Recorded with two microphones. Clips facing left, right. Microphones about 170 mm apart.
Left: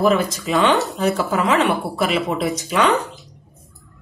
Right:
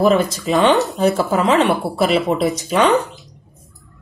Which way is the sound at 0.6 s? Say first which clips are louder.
Right 3 dB; 20° right (ahead or behind).